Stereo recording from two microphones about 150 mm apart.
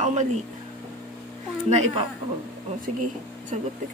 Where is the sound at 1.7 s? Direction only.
50° right (ahead or behind).